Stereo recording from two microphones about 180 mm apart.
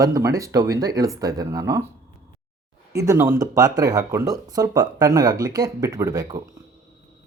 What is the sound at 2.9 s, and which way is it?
Speech, 15° right (ahead or behind).